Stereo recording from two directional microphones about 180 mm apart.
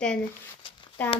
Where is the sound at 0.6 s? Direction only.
30° left (ahead or behind).